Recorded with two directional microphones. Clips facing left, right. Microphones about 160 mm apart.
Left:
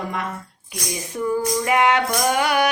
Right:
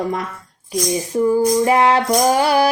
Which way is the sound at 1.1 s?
30° right (ahead or behind).